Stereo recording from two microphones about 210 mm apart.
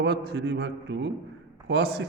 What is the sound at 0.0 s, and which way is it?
A man's voice, 50° right (ahead or behind).